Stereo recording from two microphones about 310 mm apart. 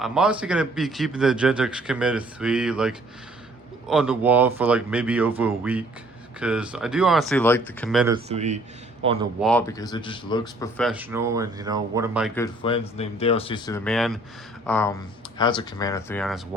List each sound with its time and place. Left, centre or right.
0.0 s speech: centre
8.1 s speech: right
9.4 s speech: centre
12.3 s speech: centre